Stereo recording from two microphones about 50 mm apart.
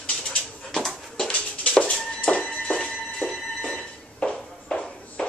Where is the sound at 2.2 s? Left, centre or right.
Centre.